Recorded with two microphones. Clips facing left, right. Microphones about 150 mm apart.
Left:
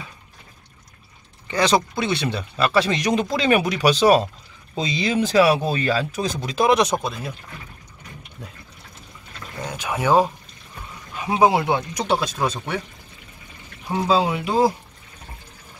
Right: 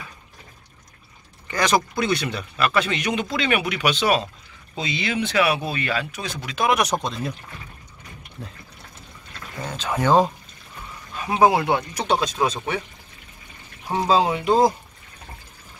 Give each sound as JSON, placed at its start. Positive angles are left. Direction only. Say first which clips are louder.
{"t": 1.5, "sound": "speech", "louder": "left 2 dB", "side_deg": 25}
{"t": 7.0, "sound": "speech", "louder": "right 1 dB", "side_deg": 5}
{"t": 8.4, "sound": "speech", "louder": "right 2 dB", "side_deg": 10}
{"t": 9.7, "sound": "speech", "louder": "even", "side_deg": 10}
{"t": 11.4, "sound": "speech", "louder": "even", "side_deg": 20}
{"t": 12.1, "sound": "speech", "louder": "right 1 dB", "side_deg": -15}
{"t": 14.0, "sound": "speech", "louder": "even", "side_deg": -35}